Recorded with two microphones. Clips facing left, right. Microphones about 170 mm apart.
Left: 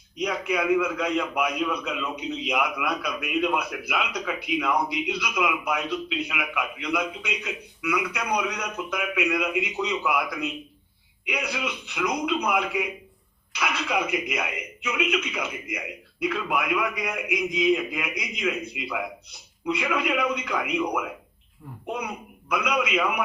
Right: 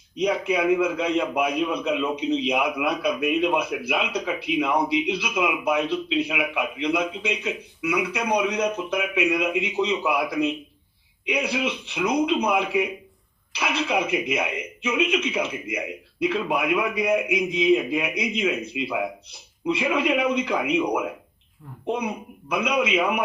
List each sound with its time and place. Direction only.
0.2 s a man's voice: 30° right (ahead or behind)
22.4 s a man's voice: 25° right (ahead or behind)